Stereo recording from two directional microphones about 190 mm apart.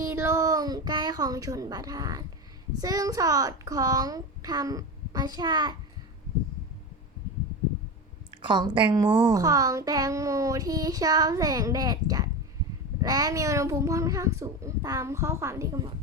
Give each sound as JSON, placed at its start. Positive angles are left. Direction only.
{"t": 0.0, "sound": "a sound", "side_deg": -15}
{"t": 2.8, "sound": "a child's voice", "side_deg": -20}
{"t": 8.4, "sound": "a child's voice", "side_deg": -25}